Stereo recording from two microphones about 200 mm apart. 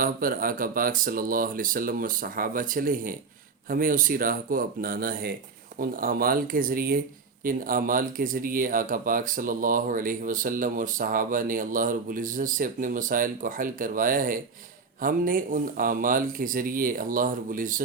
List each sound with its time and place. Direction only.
0.0 s speech: 45° right (ahead or behind)